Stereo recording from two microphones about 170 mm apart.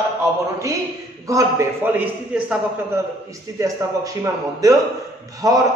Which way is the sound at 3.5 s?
20° right (ahead or behind).